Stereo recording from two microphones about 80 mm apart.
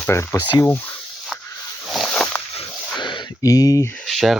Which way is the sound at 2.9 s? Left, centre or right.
Left.